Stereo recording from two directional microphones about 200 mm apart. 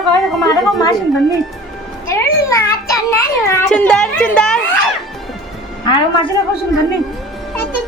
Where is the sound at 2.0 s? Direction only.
15° left (ahead or behind).